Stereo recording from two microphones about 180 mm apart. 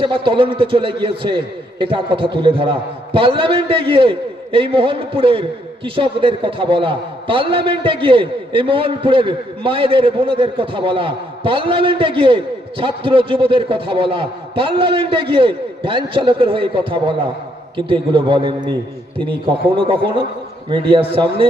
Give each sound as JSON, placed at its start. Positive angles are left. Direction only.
{"t": 0.0, "sound": "a man's voice", "side_deg": -30}